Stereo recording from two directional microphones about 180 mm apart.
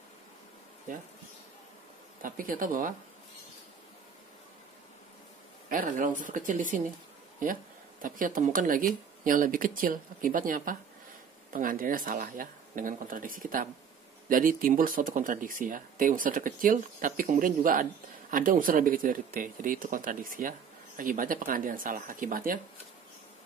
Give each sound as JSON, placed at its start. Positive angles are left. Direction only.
{"t": 0.9, "sound": "speech", "side_deg": -45}
{"t": 2.2, "sound": "speech", "side_deg": -50}
{"t": 5.7, "sound": "speech", "side_deg": -50}
{"t": 8.0, "sound": "speech", "side_deg": -50}